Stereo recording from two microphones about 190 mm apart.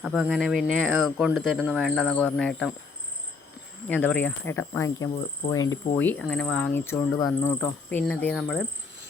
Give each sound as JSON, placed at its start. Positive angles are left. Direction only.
{"t": 0.0, "sound": "speech", "side_deg": -5}
{"t": 3.8, "sound": "speech", "side_deg": 10}
{"t": 5.5, "sound": "cricket", "side_deg": 20}
{"t": 6.0, "sound": "speech", "side_deg": 10}